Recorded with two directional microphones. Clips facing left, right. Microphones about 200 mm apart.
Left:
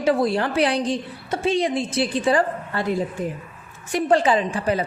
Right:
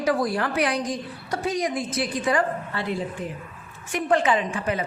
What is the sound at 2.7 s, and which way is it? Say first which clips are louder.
Speech: left 8 dB; 45° left (ahead or behind).